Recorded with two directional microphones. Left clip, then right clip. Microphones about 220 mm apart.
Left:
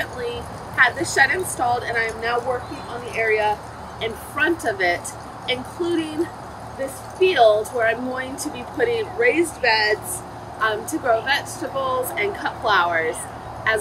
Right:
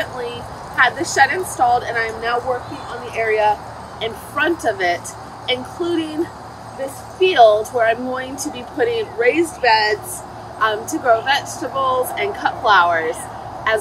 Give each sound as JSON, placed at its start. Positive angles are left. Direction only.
{"t": 0.0, "sound": "a woman's voice", "side_deg": -15}
{"t": 7.2, "sound": "speech", "side_deg": -15}